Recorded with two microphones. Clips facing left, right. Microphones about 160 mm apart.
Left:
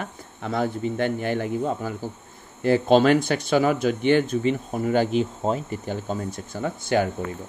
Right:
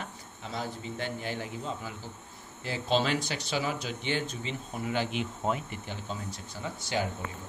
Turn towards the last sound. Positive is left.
turn(degrees=55)  # may be behind; listen again after turning